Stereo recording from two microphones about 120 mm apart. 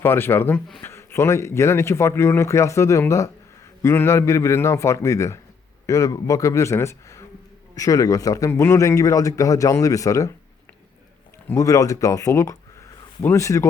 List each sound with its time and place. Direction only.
0.0 s a man's voice: 20° left (ahead or behind)
11.5 s a man's voice: 30° left (ahead or behind)